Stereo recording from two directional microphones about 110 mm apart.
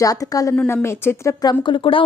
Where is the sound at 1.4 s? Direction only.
40° left (ahead or behind).